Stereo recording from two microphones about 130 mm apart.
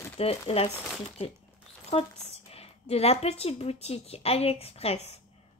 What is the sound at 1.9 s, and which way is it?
Speech, 50° left (ahead or behind).